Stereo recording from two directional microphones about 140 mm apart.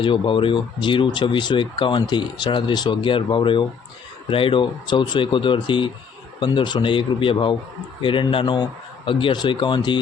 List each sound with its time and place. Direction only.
0.0 s speech: 35° left (ahead or behind)